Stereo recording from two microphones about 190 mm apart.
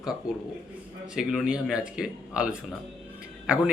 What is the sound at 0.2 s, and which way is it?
A man's voice, 5° right (ahead or behind).